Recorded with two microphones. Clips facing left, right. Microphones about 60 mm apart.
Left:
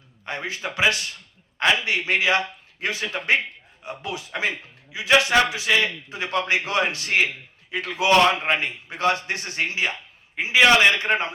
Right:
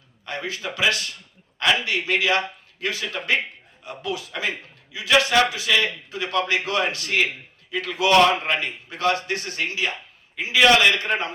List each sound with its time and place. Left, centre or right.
0.3 s a man's voice: left